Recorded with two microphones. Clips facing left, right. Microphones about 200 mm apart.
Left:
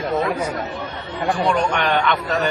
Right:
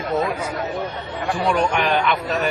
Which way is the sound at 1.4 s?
10° right (ahead or behind).